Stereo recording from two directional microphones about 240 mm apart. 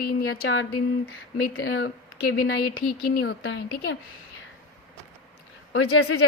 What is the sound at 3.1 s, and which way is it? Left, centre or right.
Speech, left.